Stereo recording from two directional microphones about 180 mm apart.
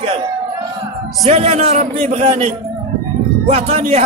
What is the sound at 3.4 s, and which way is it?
Speech, 35° right (ahead or behind).